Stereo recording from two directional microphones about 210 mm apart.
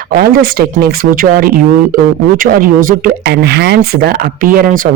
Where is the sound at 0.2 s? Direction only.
45° right (ahead or behind).